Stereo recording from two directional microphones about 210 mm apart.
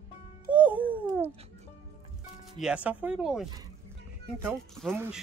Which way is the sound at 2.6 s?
5° right (ahead or behind).